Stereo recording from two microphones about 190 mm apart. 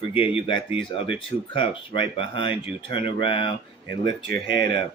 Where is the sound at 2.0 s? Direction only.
30° left (ahead or behind).